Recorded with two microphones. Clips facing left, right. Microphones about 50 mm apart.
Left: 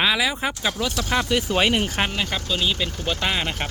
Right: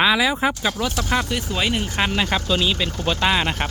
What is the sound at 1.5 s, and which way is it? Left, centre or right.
Speech, left.